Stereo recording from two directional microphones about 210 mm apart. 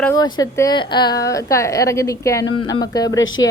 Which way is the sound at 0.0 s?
15° left (ahead or behind).